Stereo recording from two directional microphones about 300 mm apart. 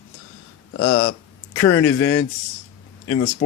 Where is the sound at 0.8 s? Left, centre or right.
Left.